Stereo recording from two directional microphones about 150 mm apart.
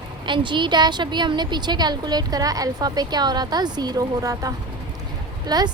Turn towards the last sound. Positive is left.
turn(degrees=-25)  # may be behind; listen again after turning